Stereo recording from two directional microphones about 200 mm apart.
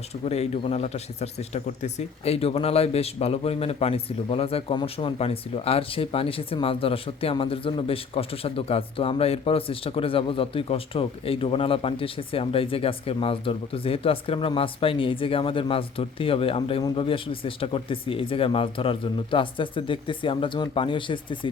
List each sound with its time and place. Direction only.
0.3 s speech: 30° left (ahead or behind)